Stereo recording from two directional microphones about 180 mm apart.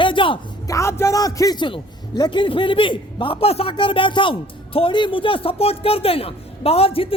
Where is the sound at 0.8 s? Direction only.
15° left (ahead or behind).